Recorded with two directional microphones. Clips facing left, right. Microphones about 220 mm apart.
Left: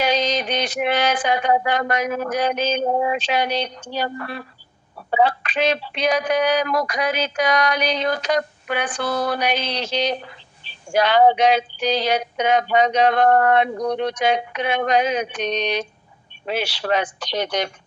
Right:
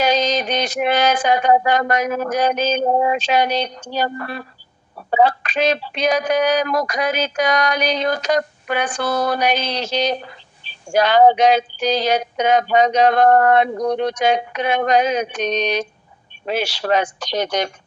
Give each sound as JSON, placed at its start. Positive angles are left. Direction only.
{"t": 0.0, "sound": "speech", "side_deg": -45}